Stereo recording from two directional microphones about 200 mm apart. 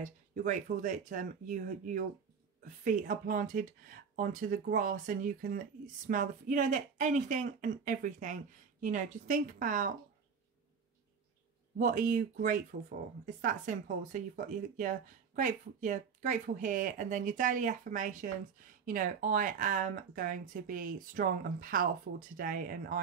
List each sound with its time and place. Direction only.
0.0 s speech: 40° right (ahead or behind)
11.8 s speech: 40° right (ahead or behind)